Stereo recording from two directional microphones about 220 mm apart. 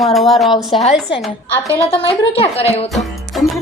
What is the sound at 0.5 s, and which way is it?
Speech, 25° left (ahead or behind).